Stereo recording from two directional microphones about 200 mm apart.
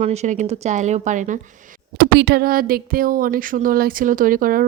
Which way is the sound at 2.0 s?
55° right (ahead or behind).